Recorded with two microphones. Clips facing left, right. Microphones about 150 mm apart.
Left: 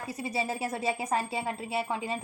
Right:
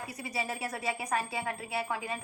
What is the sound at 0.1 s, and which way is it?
Speech, 25° left (ahead or behind).